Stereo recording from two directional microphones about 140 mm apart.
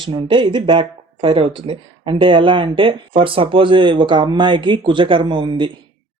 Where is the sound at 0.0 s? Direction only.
40° right (ahead or behind).